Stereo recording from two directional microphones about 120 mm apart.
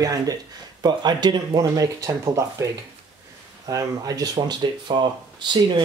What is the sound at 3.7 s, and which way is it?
Speech, 30° right (ahead or behind).